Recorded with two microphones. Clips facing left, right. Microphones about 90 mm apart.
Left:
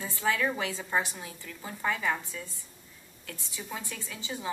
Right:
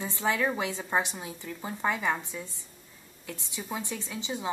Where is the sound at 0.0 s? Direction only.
20° right (ahead or behind).